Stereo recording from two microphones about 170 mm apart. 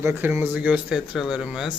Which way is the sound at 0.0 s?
15° right (ahead or behind).